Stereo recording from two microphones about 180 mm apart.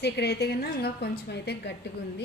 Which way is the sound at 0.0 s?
65° left (ahead or behind).